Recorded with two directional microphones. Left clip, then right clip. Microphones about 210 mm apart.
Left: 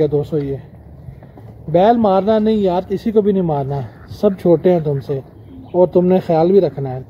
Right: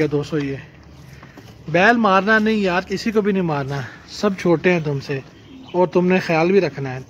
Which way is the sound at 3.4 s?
15° right (ahead or behind).